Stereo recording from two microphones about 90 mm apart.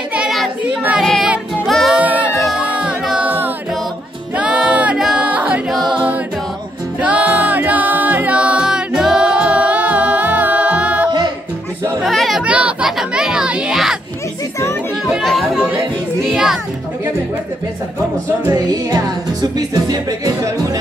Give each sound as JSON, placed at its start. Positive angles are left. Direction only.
{"t": 1.0, "sound": "music", "side_deg": 5}
{"t": 2.0, "sound": "music", "side_deg": -15}
{"t": 4.4, "sound": "music", "side_deg": -10}
{"t": 7.0, "sound": "music", "side_deg": -15}
{"t": 12.0, "sound": "a sound", "side_deg": 0}
{"t": 12.4, "sound": "chatter", "side_deg": -15}
{"t": 12.9, "sound": "music", "side_deg": -5}
{"t": 15.0, "sound": "chatter", "side_deg": -5}
{"t": 16.3, "sound": "speech", "side_deg": -10}
{"t": 18.5, "sound": "music", "side_deg": -45}